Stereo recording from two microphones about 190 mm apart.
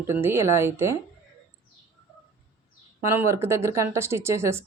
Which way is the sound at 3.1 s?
10° right (ahead or behind).